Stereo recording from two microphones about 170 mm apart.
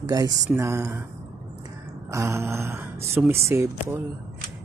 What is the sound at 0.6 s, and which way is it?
Speech, 15° right (ahead or behind).